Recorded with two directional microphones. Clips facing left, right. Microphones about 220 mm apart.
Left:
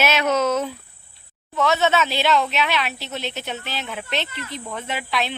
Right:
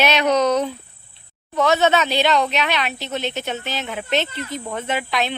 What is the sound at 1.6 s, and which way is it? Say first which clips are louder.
Speech: right 3 dB; 40° right (ahead or behind).